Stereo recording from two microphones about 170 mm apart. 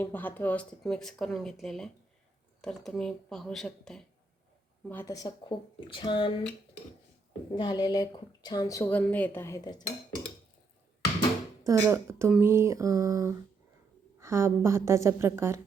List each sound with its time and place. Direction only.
0.0 s speech: 10° left (ahead or behind)
4.9 s a woman's voice: 15° left (ahead or behind)
7.5 s a woman's voice: 25° left (ahead or behind)
11.6 s a woman's voice: 15° right (ahead or behind)